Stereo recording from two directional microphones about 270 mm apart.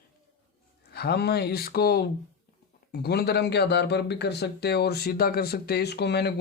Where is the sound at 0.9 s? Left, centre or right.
Left.